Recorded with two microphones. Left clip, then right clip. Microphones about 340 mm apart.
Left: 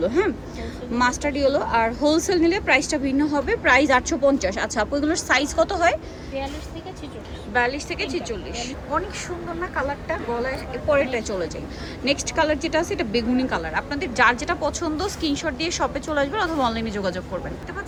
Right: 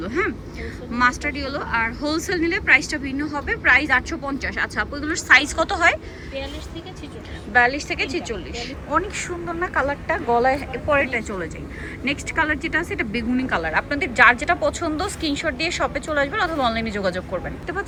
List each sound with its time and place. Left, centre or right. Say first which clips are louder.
0.0 s speech: left 3 dB; centre
7.5 s speech: right 5 dB; centre